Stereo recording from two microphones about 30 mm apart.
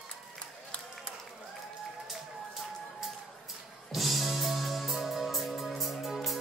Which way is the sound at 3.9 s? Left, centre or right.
Centre.